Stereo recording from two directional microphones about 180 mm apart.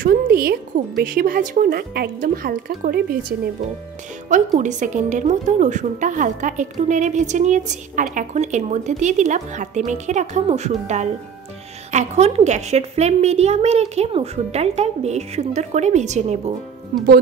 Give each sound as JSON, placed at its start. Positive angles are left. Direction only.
{"t": 0.0, "sound": "a woman's voice", "side_deg": -55}
{"t": 4.3, "sound": "a woman's voice", "side_deg": -45}